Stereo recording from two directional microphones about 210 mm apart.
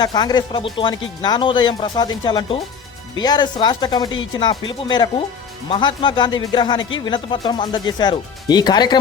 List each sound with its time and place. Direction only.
0.0 s speech: 20° left (ahead or behind)